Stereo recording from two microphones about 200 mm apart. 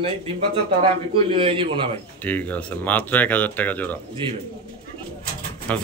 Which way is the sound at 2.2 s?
10° left (ahead or behind).